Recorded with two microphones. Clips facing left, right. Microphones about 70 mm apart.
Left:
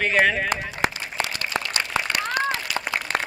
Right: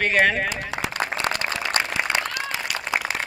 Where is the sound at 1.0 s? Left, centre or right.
Right.